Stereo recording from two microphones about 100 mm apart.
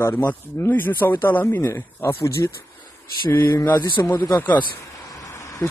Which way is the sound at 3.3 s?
20° left (ahead or behind).